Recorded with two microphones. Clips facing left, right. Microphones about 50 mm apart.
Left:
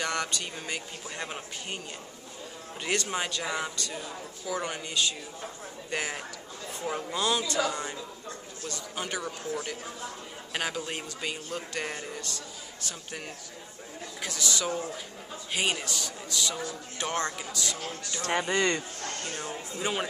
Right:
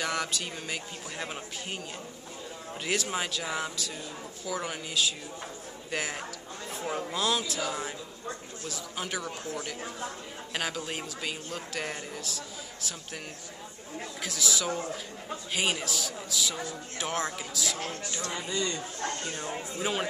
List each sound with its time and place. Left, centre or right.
0.0 s speech: centre
2.8 s speech: centre
8.6 s speech: centre
9.5 s speech: centre
14.2 s speech: centre
18.2 s a man's voice: left
18.9 s speech: right
19.8 s speech: centre